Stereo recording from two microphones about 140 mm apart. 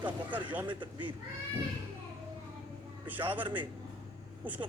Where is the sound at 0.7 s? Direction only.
35° right (ahead or behind).